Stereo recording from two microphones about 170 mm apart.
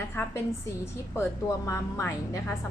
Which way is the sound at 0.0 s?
10° left (ahead or behind).